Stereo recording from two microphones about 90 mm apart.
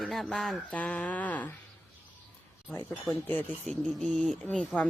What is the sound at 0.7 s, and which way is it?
Speech, 15° left (ahead or behind).